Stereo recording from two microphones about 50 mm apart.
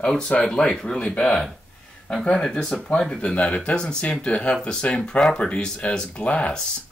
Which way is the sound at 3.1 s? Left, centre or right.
Left.